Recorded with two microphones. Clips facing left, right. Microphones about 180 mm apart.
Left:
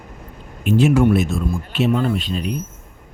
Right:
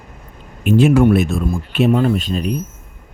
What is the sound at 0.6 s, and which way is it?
Speech, 60° right (ahead or behind).